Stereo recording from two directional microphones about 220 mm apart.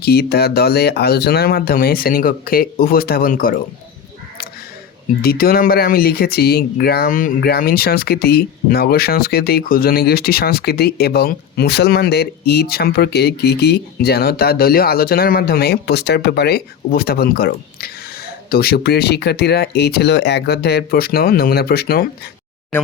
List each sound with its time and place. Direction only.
0.0 s speech: 45° left (ahead or behind)
5.2 s speech: 40° left (ahead or behind)